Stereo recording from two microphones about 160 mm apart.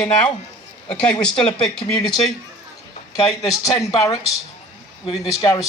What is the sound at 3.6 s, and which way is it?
Speech, 20° left (ahead or behind).